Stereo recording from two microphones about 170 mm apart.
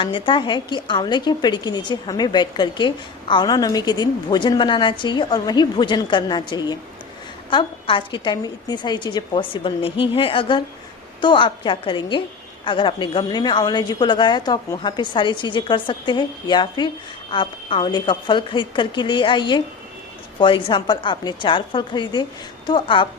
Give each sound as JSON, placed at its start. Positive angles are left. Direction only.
{"t": 0.0, "sound": "a woman's voice", "side_deg": 30}